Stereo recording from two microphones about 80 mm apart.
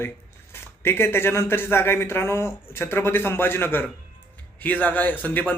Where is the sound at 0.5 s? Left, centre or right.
Left.